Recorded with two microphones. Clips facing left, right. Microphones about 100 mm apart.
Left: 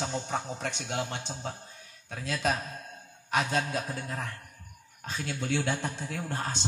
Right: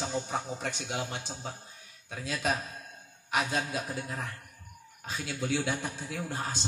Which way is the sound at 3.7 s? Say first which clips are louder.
Left 1 dB; 10° right (ahead or behind).